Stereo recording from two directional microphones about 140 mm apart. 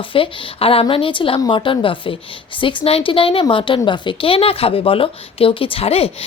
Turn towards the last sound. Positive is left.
turn(degrees=45)  # may be behind; listen again after turning